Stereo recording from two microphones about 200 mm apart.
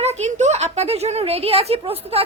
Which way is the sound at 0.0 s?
35° right (ahead or behind).